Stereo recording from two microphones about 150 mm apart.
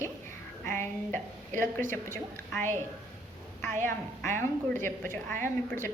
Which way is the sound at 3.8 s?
15° left (ahead or behind).